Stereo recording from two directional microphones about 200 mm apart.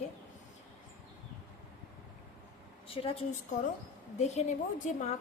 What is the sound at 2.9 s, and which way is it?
Speech, 30° left (ahead or behind).